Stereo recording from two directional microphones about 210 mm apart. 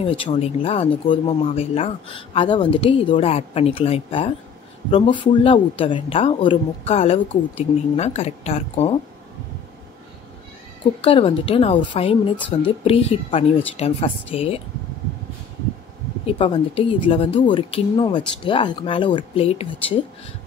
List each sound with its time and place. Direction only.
0.0 s speech: 25° left (ahead or behind)
11.0 s speech: 25° left (ahead or behind)
16.3 s speech: 25° left (ahead or behind)